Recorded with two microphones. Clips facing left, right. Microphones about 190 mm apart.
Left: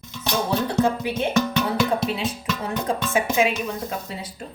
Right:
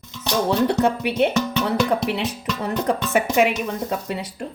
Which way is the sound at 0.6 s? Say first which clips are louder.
Right 2 dB; 70° right (ahead or behind).